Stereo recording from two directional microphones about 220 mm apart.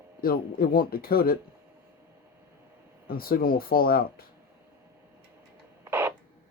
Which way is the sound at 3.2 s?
40° left (ahead or behind).